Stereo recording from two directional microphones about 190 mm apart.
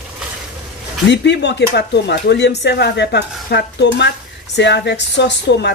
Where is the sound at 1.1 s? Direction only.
65° left (ahead or behind).